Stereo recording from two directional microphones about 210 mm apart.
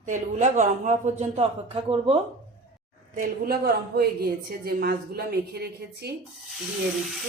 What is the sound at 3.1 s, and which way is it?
A woman's voice, 45° right (ahead or behind).